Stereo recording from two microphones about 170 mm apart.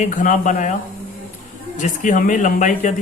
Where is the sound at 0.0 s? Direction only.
50° left (ahead or behind).